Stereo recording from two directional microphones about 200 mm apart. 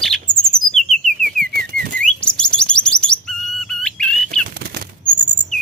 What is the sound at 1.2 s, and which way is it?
Bird, 45° right (ahead or behind).